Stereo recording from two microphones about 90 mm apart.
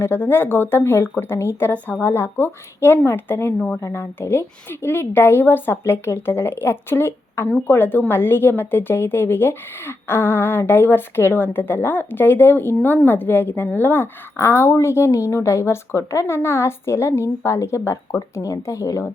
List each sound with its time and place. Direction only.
0.0 s a woman's voice: 25° left (ahead or behind)